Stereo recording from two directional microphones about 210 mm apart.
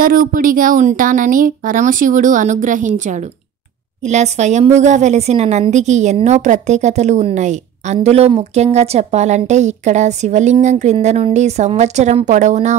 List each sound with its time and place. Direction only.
0.0 s a woman's voice: 40° right (ahead or behind)